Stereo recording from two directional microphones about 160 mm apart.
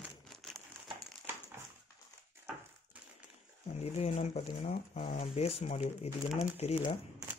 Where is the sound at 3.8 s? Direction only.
40° left (ahead or behind).